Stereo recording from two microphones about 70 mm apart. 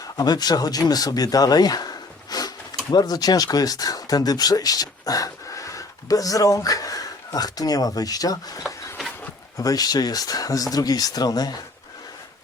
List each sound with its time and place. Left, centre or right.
0.2 s speech: left
9.6 s speech: left